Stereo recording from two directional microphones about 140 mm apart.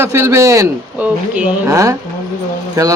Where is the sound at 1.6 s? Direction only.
20° right (ahead or behind).